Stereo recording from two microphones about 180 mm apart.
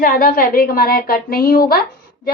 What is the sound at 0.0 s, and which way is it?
A woman's voice, 50° left (ahead or behind).